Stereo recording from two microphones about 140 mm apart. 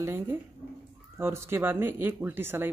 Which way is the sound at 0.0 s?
15° right (ahead or behind).